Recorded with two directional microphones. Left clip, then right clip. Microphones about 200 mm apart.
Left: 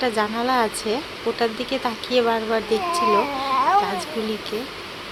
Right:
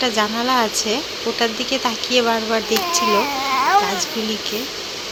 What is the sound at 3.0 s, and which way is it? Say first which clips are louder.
Cat: right 2 dB; 10° left (ahead or behind).